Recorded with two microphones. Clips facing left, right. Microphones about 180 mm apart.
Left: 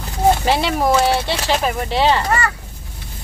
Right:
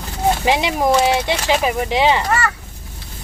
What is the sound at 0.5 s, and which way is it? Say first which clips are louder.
Speech: even; 15° right (ahead or behind).